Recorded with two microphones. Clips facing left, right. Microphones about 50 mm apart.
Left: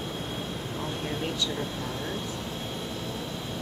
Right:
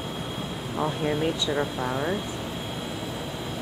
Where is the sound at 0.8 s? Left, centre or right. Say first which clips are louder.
Right 8 dB; centre.